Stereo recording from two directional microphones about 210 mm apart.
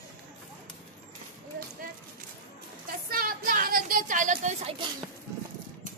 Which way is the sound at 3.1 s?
45° right (ahead or behind).